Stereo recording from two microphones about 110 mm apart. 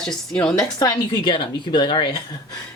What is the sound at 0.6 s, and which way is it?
Speech, 40° left (ahead or behind).